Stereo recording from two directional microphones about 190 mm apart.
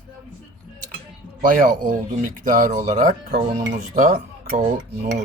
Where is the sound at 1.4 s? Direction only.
45° right (ahead or behind).